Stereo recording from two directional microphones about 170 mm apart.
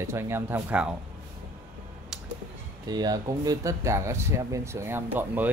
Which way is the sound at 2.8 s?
25° right (ahead or behind).